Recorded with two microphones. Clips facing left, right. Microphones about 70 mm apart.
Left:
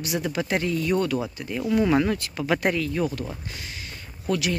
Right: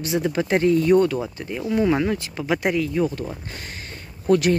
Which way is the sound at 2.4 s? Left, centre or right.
Centre.